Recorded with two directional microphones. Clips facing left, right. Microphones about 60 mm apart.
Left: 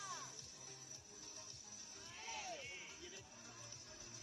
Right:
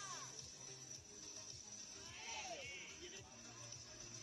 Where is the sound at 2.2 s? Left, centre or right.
Left.